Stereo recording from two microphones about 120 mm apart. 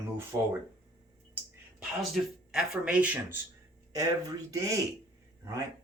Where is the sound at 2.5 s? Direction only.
5° right (ahead or behind).